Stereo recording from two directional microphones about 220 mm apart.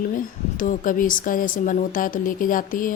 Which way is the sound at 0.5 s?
35° left (ahead or behind).